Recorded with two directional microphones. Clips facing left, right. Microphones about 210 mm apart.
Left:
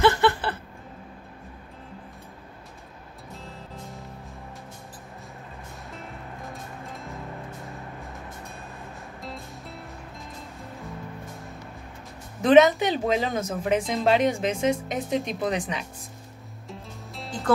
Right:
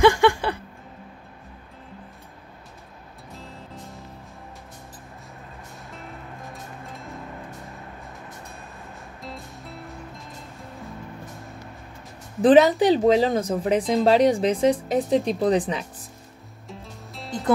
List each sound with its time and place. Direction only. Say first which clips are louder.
0.0 s music: right 4 dB; 15° right (ahead or behind)
6.5 s music: even; centre (ahead or behind)
9.2 s music: right 1 dB; centre (ahead or behind)
12.4 s speech: right 2 dB; 30° right (ahead or behind)
16.6 s music: even; centre (ahead or behind)